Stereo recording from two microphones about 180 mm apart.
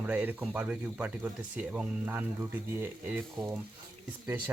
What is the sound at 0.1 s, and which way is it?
Speech, 10° right (ahead or behind).